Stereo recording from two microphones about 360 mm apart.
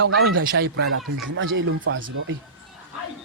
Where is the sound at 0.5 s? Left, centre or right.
Right.